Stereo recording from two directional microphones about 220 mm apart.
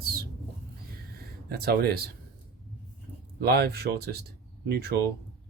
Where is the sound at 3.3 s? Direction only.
45° right (ahead or behind).